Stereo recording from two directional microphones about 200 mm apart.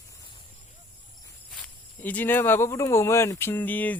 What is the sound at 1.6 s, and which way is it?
Speech, 10° left (ahead or behind).